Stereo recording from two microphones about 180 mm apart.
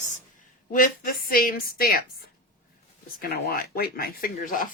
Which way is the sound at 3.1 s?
60° left (ahead or behind).